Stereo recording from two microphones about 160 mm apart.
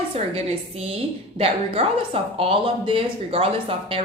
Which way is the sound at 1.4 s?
35° right (ahead or behind).